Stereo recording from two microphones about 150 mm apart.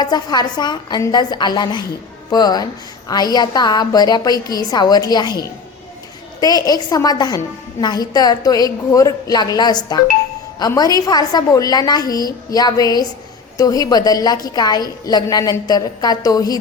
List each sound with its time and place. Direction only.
0.0 s a woman's voice: 25° left (ahead or behind)